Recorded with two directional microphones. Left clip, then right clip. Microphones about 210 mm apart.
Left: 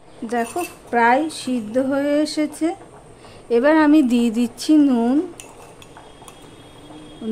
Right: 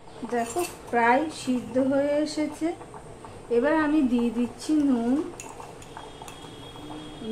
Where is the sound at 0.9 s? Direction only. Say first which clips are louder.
Left 6 dB; 55° left (ahead or behind).